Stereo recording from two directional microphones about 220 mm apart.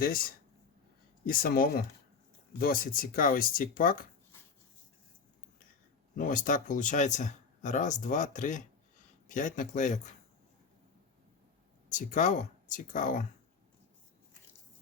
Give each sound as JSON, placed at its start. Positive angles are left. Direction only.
{"t": 0.0, "sound": "speech", "side_deg": 40}
{"t": 6.1, "sound": "speech", "side_deg": 40}
{"t": 11.9, "sound": "speech", "side_deg": 35}